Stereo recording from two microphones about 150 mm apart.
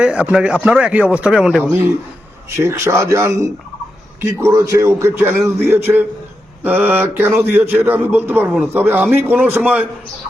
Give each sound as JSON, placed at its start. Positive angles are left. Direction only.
{"t": 0.0, "sound": "a man's voice", "side_deg": -5}
{"t": 2.6, "sound": "a man's voice", "side_deg": -20}